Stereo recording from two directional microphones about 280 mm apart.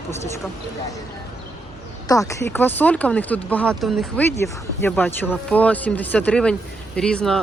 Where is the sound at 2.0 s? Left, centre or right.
Centre.